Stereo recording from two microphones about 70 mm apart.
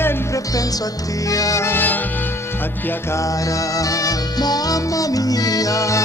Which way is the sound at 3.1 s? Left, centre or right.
Left.